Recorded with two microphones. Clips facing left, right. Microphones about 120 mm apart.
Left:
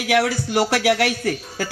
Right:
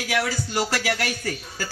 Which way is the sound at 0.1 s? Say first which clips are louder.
Left 7 dB; 65° left (ahead or behind).